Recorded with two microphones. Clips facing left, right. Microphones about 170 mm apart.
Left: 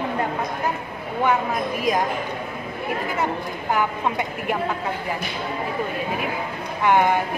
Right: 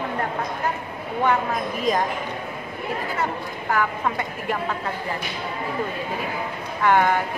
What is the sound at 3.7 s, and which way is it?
Speech, 20° left (ahead or behind).